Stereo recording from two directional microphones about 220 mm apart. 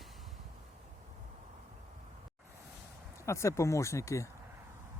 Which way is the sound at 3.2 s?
15° left (ahead or behind).